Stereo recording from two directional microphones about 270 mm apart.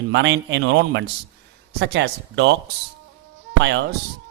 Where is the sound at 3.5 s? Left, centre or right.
Right.